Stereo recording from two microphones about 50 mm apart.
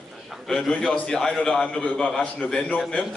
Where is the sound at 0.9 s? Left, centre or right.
Left.